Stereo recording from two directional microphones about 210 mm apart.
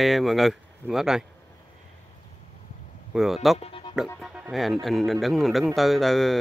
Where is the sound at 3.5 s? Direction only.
25° left (ahead or behind).